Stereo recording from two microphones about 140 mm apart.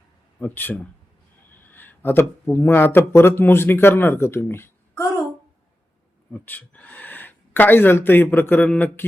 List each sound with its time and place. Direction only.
0.3 s speech: 15° left (ahead or behind)
6.3 s speech: 10° left (ahead or behind)